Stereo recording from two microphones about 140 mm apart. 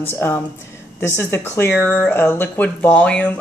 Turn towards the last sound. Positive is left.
turn(degrees=10)  # may be behind; listen again after turning